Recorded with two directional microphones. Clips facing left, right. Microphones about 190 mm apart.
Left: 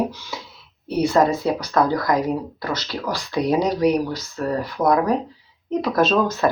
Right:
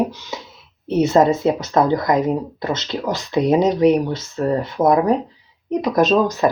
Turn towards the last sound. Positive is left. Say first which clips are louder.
# right 3 dB
turn(degrees=-15)  # may be behind; listen again after turning